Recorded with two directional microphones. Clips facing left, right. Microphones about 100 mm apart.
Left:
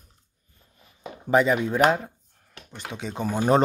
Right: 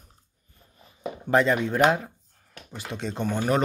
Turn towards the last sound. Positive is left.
turn(degrees=0)  # may be behind; listen again after turning